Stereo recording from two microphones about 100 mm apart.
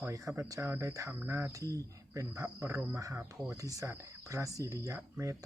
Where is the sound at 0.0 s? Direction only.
30° right (ahead or behind).